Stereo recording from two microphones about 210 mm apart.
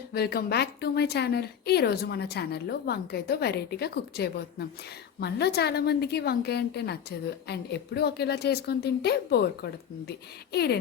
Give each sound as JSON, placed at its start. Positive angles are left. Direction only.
{"t": 0.1, "sound": "a woman's voice", "side_deg": 50}